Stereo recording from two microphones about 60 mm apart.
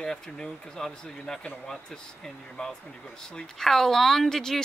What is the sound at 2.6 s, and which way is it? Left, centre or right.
A woman's voice, centre.